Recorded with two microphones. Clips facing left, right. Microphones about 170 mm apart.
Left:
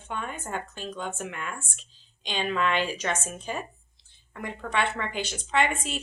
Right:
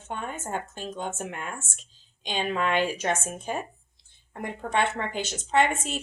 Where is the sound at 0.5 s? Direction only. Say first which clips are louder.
Right 1 dB; 50° right (ahead or behind).